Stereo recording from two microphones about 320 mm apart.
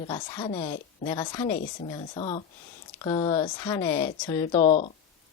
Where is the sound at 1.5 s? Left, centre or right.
Left.